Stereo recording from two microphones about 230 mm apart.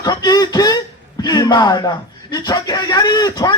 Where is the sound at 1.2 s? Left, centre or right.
Centre.